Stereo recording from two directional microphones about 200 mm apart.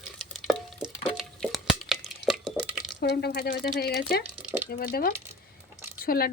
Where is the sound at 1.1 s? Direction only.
Centre (ahead or behind).